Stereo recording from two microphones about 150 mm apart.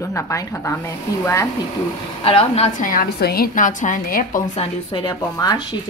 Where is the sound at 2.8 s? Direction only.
80° left.